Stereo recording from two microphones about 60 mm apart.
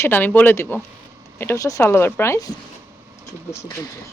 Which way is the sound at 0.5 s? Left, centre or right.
Left.